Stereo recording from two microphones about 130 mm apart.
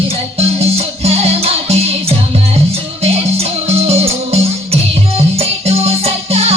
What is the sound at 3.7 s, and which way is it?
Music, 50° right (ahead or behind).